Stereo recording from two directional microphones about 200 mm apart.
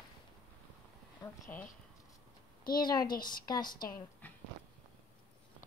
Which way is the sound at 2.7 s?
20° left (ahead or behind).